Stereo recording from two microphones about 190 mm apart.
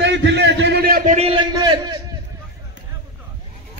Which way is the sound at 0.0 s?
65° right (ahead or behind).